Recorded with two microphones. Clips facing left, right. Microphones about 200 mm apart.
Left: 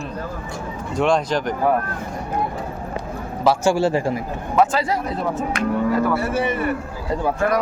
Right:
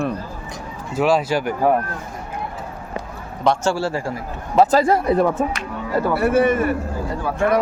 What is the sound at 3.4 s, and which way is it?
Speech, 10° left (ahead or behind).